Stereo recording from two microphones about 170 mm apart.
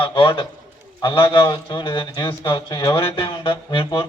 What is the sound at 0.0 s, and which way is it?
A man's voice, 30° left (ahead or behind).